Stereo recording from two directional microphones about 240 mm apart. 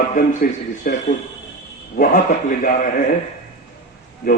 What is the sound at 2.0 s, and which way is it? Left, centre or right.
Speech, left.